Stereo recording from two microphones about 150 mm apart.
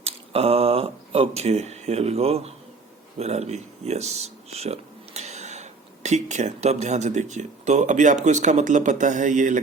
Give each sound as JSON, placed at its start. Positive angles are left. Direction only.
{"t": 0.0, "sound": "speech", "side_deg": -40}